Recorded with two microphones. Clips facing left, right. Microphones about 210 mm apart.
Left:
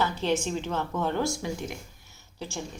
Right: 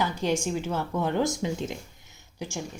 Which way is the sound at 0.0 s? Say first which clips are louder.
Even; 10° right (ahead or behind).